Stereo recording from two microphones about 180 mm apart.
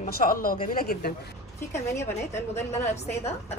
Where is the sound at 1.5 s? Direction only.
15° left (ahead or behind).